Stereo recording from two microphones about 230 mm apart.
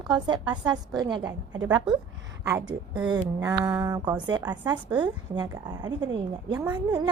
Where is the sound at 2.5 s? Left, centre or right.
Centre.